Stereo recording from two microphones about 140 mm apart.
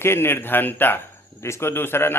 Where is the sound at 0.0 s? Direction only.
15° left (ahead or behind).